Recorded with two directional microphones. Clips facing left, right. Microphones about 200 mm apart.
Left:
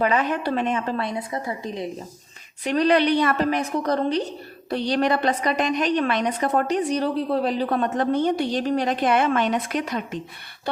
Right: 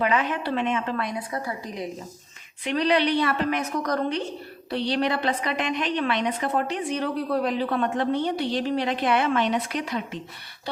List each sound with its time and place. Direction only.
0.0 s a woman's voice: 40° left (ahead or behind)
2.6 s a woman's voice: 45° left (ahead or behind); by 4.2 s 30° left (ahead or behind)
4.7 s a woman's voice: 45° left (ahead or behind)